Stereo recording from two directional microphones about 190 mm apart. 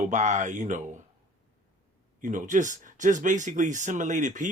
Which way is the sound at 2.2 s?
40° right (ahead or behind).